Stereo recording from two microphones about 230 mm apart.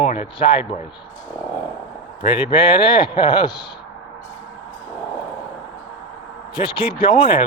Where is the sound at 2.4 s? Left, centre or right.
Left.